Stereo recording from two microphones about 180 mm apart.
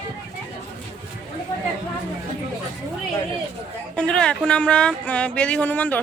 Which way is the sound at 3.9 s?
5° left (ahead or behind).